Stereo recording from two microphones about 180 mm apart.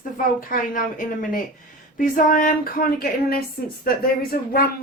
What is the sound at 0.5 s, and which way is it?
Speech, 50° left (ahead or behind).